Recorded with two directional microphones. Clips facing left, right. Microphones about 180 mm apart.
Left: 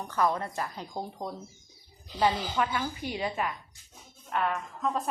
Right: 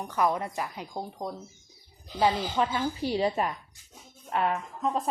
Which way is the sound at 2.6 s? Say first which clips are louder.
Right 3 dB; 30° right (ahead or behind).